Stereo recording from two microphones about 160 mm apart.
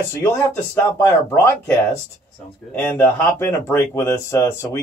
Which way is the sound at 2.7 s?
15° left (ahead or behind).